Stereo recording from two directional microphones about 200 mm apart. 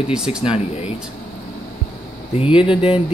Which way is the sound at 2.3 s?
25° left (ahead or behind).